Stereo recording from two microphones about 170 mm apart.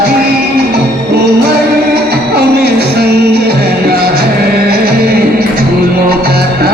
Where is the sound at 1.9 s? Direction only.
70° right (ahead or behind).